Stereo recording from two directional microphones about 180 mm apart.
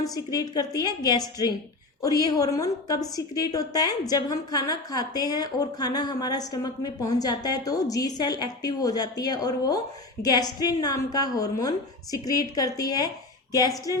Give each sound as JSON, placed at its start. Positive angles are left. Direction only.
{"t": 0.0, "sound": "a woman's voice", "side_deg": 20}